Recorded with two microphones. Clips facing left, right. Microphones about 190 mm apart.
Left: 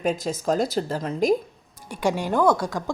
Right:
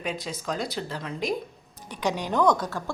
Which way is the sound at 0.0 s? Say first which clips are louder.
Left 8 dB; 45° left (ahead or behind).